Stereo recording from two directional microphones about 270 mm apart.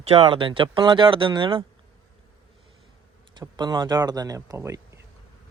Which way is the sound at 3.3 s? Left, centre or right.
Centre.